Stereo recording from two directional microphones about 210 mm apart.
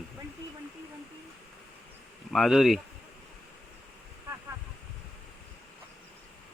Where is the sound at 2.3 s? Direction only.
Centre (ahead or behind).